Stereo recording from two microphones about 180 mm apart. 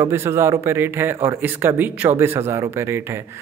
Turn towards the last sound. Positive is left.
turn(degrees=-15)  # may be behind; listen again after turning